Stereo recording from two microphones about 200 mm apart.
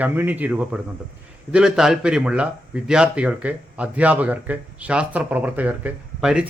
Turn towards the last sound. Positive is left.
turn(degrees=-5)  # may be behind; listen again after turning